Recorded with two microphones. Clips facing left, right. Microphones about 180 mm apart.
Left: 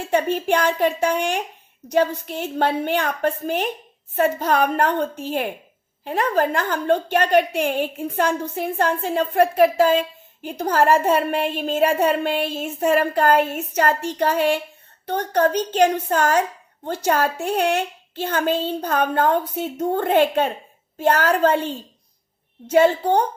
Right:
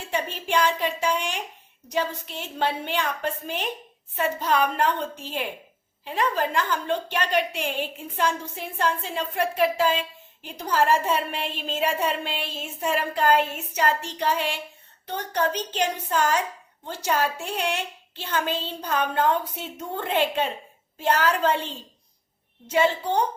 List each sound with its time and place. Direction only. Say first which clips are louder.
0.1 s a woman's voice: left 7 dB; 50° left (ahead or behind)